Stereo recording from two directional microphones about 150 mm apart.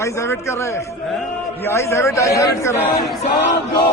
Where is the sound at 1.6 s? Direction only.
20° left (ahead or behind).